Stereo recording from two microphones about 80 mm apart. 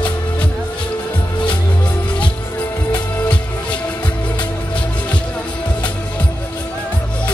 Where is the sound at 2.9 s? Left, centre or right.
Centre.